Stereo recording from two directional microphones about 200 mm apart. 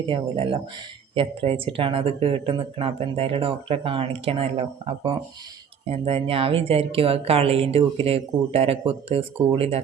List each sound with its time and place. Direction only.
0.1 s speech: 25° right (ahead or behind)